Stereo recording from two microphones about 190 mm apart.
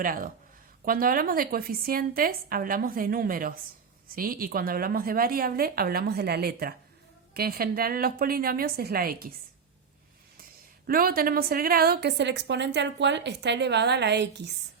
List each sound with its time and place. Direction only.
0.0 s a woman's voice: 45° right (ahead or behind)
10.8 s a woman's voice: 50° right (ahead or behind)